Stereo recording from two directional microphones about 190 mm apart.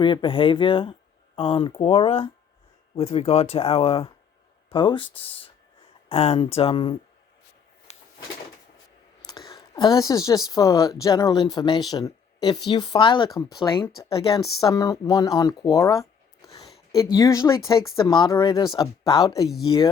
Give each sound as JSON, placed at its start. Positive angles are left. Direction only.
{"t": 0.0, "sound": "speech", "side_deg": 25}
{"t": 7.9, "sound": "a sound", "side_deg": 35}
{"t": 9.2, "sound": "clicking", "side_deg": 20}
{"t": 10.5, "sound": "speech", "side_deg": 20}